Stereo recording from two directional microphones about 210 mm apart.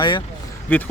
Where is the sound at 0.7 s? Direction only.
10° left (ahead or behind).